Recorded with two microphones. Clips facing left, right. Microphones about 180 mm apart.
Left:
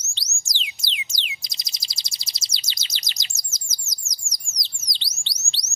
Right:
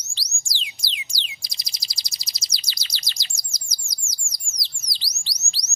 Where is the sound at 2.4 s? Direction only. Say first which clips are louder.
Left 1 dB; 25° left (ahead or behind).